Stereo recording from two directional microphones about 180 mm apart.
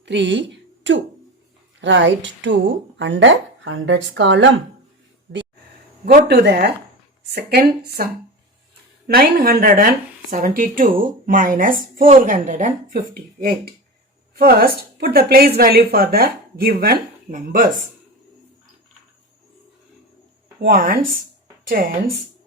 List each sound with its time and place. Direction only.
0.0 s speech: 80° right
6.2 s a woman's voice: 65° right (ahead or behind); by 17.7 s 50° right (ahead or behind)
20.6 s a woman's voice: 55° right (ahead or behind)